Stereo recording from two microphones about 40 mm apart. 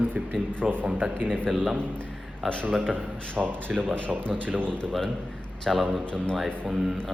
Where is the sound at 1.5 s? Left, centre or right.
Centre.